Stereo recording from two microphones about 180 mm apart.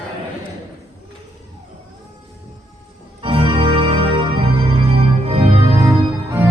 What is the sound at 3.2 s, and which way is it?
Music, 30° right (ahead or behind).